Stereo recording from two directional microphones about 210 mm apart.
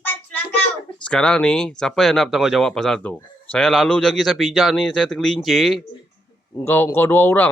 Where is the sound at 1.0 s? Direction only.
5° left (ahead or behind).